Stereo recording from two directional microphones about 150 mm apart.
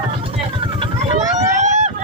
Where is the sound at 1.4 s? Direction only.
50° right (ahead or behind).